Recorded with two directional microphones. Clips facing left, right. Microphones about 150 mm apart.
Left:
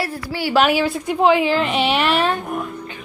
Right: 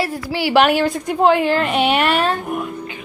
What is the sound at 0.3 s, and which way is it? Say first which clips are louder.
Speech: right 2 dB; 75° right (ahead or behind).